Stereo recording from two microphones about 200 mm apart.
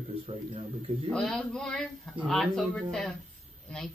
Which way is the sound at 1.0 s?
Centre (ahead or behind).